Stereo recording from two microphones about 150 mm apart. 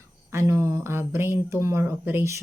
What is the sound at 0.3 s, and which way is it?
Speech, 20° right (ahead or behind).